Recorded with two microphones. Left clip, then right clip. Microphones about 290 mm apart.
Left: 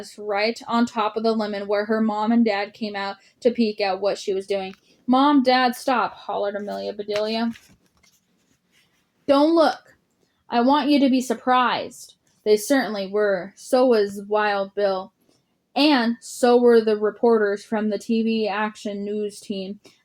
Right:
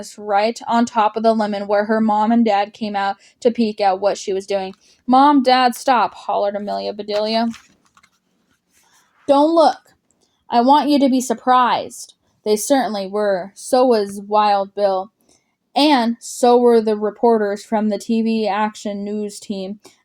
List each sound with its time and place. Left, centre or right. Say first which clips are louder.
0.0 s speech: right 6 dB; right
10.5 s a woman's voice: right 5 dB; right